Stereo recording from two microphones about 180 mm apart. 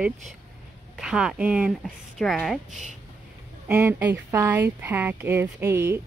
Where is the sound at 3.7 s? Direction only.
10° right (ahead or behind).